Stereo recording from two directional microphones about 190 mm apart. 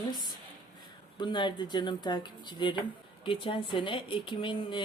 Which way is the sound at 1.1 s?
25° left (ahead or behind).